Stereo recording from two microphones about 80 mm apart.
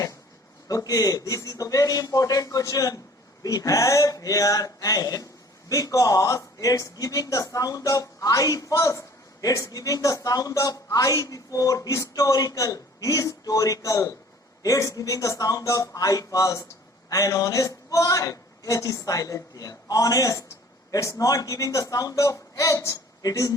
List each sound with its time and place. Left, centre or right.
0.7 s speech: left